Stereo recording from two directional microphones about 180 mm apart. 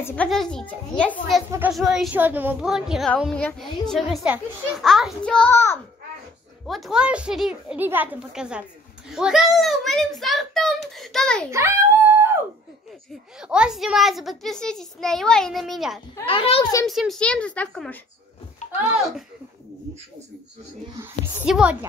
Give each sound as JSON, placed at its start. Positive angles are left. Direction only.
{"t": 0.0, "sound": "a child's voice", "side_deg": 10}
{"t": 2.1, "sound": "a child's voice", "side_deg": -10}
{"t": 6.6, "sound": "a child's voice", "side_deg": 0}
{"t": 11.5, "sound": "dog", "side_deg": -15}
{"t": 13.4, "sound": "a child's voice", "side_deg": -5}
{"t": 16.3, "sound": "a child's voice", "side_deg": 30}
{"t": 16.8, "sound": "a child's voice", "side_deg": 0}
{"t": 21.0, "sound": "a woman's voice", "side_deg": -5}